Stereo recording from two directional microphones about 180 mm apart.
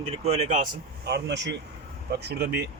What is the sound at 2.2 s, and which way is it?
Speech, 60° right (ahead or behind).